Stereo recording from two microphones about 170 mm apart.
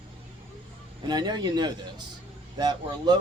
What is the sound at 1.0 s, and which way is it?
Speech, 25° right (ahead or behind).